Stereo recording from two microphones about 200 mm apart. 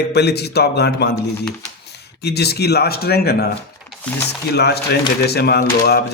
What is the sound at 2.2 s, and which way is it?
Speech, 55° left (ahead or behind).